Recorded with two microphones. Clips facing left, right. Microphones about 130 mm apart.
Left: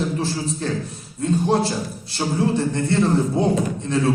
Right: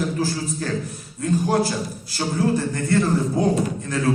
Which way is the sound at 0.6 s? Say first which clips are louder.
Left 1 dB; 25° left (ahead or behind).